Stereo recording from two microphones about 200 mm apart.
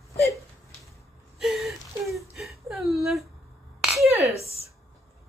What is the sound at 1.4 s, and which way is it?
Whimper, centre (ahead or behind).